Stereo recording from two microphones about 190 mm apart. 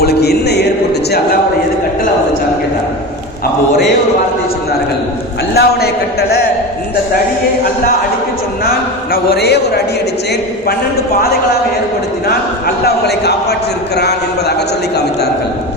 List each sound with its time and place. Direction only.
0.0 s music: 55° left (ahead or behind)
5.5 s speech: 55° left (ahead or behind)
9.1 s a man's voice: 55° left (ahead or behind)
12.3 s a man's voice: 55° left (ahead or behind)